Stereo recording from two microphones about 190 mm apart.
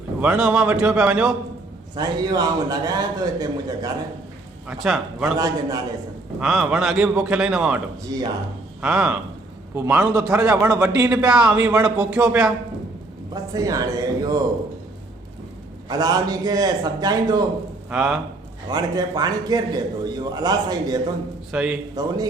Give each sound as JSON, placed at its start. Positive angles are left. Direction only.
{"t": 0.2, "sound": "a man's voice", "side_deg": -5}
{"t": 2.0, "sound": "a man's voice", "side_deg": -20}
{"t": 4.7, "sound": "a man's voice", "side_deg": -5}
{"t": 5.4, "sound": "a man's voice", "side_deg": -20}
{"t": 6.4, "sound": "a man's voice", "side_deg": 0}
{"t": 8.0, "sound": "a man's voice", "side_deg": -20}
{"t": 8.8, "sound": "a man's voice", "side_deg": -5}
{"t": 11.3, "sound": "speech", "side_deg": -5}
{"t": 13.3, "sound": "a man's voice", "side_deg": -20}
{"t": 15.9, "sound": "a man's voice", "side_deg": -20}
{"t": 17.9, "sound": "a man's voice", "side_deg": -5}
{"t": 18.7, "sound": "a man's voice", "side_deg": -20}
{"t": 21.5, "sound": "speech", "side_deg": -5}
{"t": 22.0, "sound": "a man's voice", "side_deg": -20}